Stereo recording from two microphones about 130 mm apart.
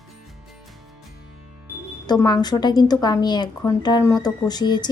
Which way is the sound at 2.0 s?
30° left (ahead or behind).